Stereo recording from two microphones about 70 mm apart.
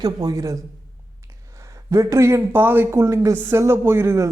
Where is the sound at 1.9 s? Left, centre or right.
Right.